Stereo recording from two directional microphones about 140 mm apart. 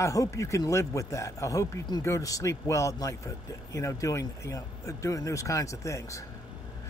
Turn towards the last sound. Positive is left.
turn(degrees=20)  # may be behind; listen again after turning